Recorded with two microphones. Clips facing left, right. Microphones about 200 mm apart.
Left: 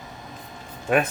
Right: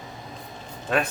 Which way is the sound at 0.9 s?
15° left (ahead or behind).